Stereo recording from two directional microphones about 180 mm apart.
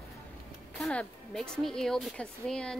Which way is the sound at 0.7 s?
Centre (ahead or behind).